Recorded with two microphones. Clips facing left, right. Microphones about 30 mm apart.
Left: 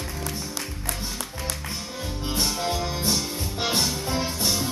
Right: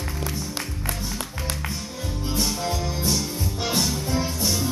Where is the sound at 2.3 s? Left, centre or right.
Centre.